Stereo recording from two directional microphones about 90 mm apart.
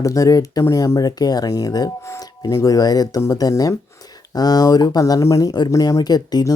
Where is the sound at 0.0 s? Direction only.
40° left (ahead or behind).